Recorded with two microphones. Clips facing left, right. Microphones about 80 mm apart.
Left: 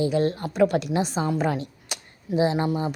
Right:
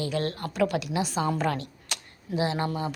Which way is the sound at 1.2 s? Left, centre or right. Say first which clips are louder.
Left 2 dB; centre.